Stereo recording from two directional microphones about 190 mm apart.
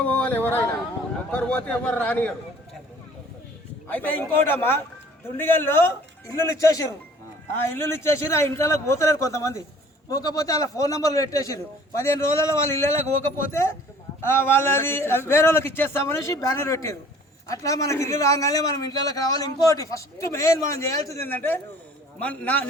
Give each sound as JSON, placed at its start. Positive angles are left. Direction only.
{"t": 0.0, "sound": "a man's voice", "side_deg": 10}
{"t": 3.8, "sound": "a man's voice", "side_deg": 10}